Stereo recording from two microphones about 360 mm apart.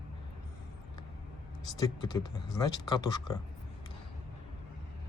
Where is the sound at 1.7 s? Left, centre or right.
Centre.